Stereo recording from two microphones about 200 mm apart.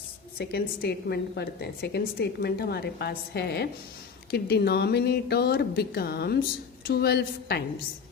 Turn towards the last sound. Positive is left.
turn(degrees=55)  # may be behind; listen again after turning